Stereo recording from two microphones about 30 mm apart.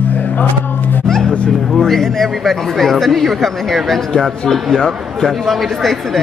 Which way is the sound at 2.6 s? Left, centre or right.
Centre.